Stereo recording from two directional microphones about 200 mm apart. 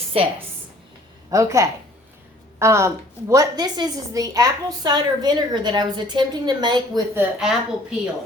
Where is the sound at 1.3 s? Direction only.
15° right (ahead or behind).